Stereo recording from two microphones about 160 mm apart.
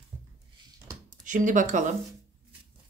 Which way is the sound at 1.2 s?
55° right (ahead or behind).